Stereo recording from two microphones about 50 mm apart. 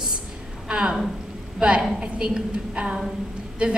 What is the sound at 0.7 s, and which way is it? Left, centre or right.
A woman's voice, centre.